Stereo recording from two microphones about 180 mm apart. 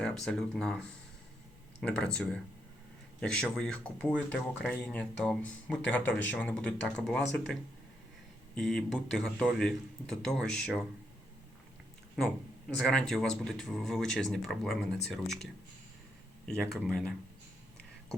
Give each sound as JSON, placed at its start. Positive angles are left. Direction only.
{"t": 0.0, "sound": "speech", "side_deg": 5}
{"t": 8.5, "sound": "speech", "side_deg": 5}
{"t": 12.7, "sound": "speech", "side_deg": 5}
{"t": 16.5, "sound": "speech", "side_deg": 5}